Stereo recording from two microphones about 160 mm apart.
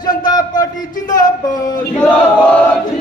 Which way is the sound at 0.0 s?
25° left (ahead or behind).